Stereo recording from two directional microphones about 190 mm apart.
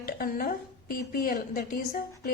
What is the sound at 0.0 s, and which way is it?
A woman's voice, 50° left (ahead or behind).